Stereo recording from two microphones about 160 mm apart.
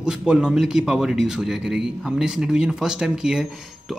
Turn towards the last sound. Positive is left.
turn(degrees=-5)  # may be behind; listen again after turning